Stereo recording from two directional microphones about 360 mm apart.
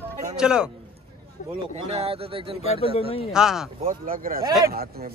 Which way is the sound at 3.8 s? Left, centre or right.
Right.